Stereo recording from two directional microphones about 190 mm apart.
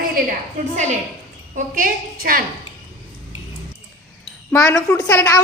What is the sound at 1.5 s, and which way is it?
Speech, 50° right (ahead or behind).